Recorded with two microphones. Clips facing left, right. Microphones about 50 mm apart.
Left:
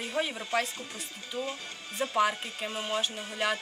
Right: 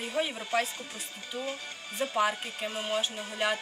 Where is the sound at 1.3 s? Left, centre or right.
Centre.